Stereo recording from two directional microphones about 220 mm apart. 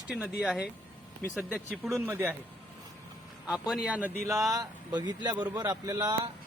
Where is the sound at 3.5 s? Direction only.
Centre (ahead or behind).